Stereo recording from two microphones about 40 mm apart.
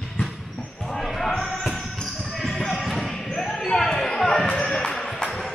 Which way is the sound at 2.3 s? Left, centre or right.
Centre.